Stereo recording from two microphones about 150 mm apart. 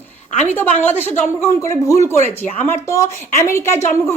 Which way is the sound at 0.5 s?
15° left (ahead or behind).